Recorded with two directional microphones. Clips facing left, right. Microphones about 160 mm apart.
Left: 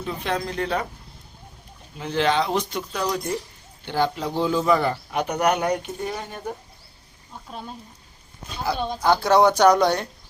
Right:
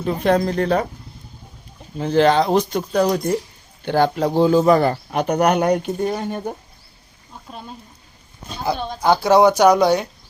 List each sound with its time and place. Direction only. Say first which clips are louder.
0.0 s speech: right 9 dB; 45° right (ahead or behind)
2.0 s speech: right 7 dB; 40° right (ahead or behind)
9.0 s speech: right 4 dB; 10° right (ahead or behind)